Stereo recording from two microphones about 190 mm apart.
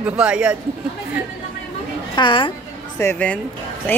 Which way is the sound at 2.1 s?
25° left (ahead or behind).